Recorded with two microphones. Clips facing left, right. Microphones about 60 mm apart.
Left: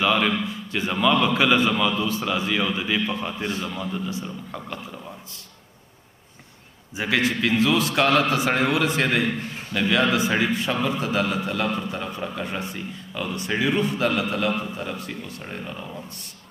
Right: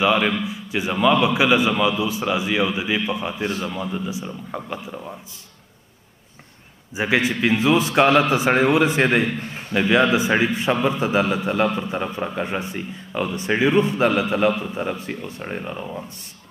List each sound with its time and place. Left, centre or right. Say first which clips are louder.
0.0 s a man's voice: right 2 dB; centre
7.0 s a man's voice: right 3 dB; right